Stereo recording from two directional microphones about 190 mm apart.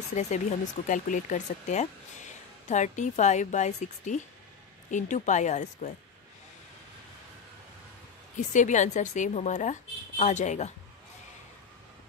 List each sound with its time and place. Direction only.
0.1 s speech: 35° left (ahead or behind)
8.5 s speech: 40° left (ahead or behind)